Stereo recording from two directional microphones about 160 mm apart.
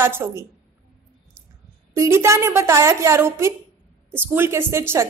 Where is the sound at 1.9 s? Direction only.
20° right (ahead or behind).